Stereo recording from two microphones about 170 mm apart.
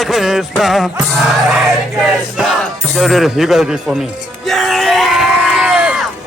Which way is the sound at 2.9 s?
Centre (ahead or behind).